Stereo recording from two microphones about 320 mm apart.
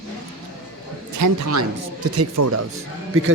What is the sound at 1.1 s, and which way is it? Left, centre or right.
Speech, right.